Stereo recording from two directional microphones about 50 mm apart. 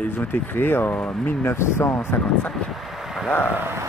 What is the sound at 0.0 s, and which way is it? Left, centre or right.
Speech, left.